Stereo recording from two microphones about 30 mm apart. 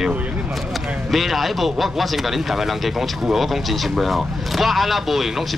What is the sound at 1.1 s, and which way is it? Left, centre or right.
Speech, centre.